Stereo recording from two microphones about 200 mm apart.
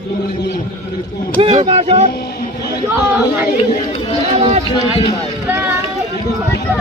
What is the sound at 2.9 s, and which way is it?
Speech, 10° right (ahead or behind).